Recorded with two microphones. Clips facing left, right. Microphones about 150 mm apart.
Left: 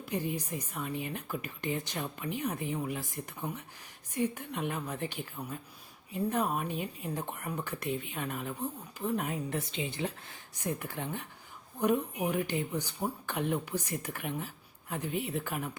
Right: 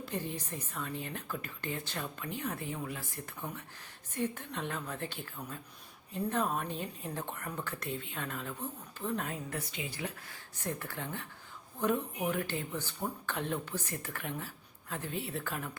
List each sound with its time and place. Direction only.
0.0 s speech: 15° left (ahead or behind)